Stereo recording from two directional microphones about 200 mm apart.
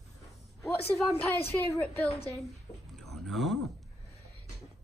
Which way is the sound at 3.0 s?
Centre (ahead or behind).